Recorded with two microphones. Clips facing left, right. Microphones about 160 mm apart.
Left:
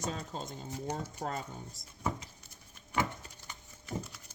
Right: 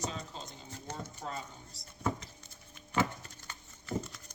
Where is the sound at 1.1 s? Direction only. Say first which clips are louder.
Left 4 dB; 50° left (ahead or behind).